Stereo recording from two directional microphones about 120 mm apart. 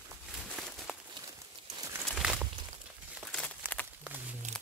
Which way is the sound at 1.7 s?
25° right (ahead or behind).